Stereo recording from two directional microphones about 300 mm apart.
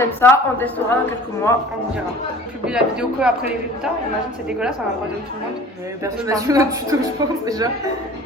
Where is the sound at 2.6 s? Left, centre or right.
Centre.